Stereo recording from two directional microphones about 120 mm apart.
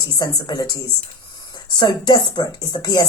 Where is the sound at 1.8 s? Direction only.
40° left (ahead or behind).